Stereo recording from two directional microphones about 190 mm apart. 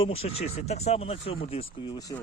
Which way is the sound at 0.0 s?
30° left (ahead or behind).